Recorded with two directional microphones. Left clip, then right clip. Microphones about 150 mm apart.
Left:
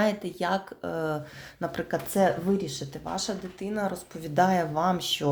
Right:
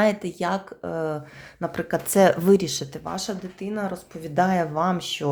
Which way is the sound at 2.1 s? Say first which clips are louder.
Right 7 dB; 45° right (ahead or behind).